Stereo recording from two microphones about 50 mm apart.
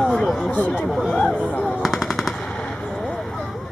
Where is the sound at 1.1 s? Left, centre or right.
Centre.